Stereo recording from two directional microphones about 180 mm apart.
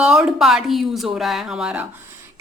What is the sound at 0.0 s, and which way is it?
A woman's voice, 5° right (ahead or behind).